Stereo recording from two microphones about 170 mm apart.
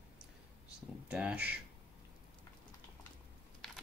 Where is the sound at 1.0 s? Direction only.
5° right (ahead or behind).